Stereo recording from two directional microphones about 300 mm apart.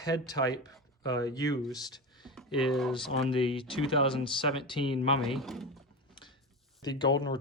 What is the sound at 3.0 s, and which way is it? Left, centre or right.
Speech, centre.